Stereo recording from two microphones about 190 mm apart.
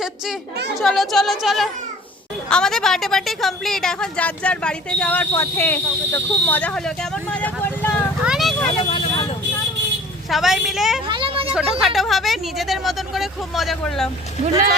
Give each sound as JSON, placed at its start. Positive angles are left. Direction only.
{"t": 0.8, "sound": "a woman's voice", "side_deg": 0}
{"t": 8.2, "sound": "vehicle", "side_deg": 0}
{"t": 8.8, "sound": "vehicle", "side_deg": 30}
{"t": 10.2, "sound": "a woman's voice", "side_deg": 0}
{"t": 11.1, "sound": "vehicle", "side_deg": -30}
{"t": 11.5, "sound": "a woman's voice", "side_deg": 0}